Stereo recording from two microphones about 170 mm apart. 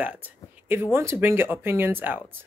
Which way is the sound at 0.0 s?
10° right (ahead or behind).